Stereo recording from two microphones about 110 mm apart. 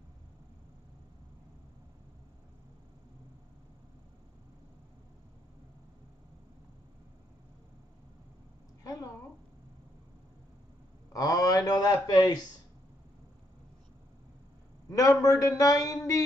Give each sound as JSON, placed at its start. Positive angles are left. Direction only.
{"t": 8.8, "sound": "a sound", "side_deg": 35}
{"t": 11.1, "sound": "speech", "side_deg": 35}
{"t": 14.9, "sound": "speech", "side_deg": 30}